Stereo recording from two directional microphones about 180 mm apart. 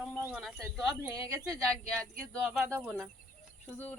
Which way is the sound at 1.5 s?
5° left (ahead or behind).